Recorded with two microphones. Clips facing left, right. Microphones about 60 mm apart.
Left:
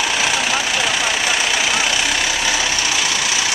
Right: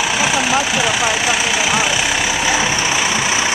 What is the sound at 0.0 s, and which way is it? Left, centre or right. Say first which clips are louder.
Vehicle: right 2 dB; centre.